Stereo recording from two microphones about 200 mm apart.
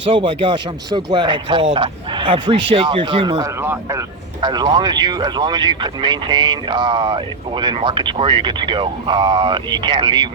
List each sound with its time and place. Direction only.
0.0 s speech: 25° right (ahead or behind)